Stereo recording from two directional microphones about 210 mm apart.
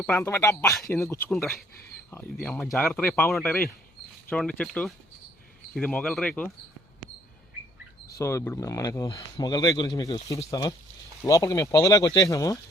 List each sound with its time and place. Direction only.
0.0 s speech: 10° left (ahead or behind)
0.8 s speech: centre (ahead or behind)
1.0 s speech: 15° left (ahead or behind)
1.3 s speech: centre (ahead or behind)
8.2 s speech: 15° left (ahead or behind)